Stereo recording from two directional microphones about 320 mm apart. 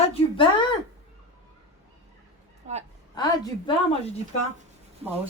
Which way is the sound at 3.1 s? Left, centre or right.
Centre.